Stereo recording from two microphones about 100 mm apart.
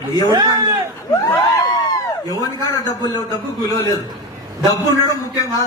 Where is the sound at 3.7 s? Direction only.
40° left (ahead or behind).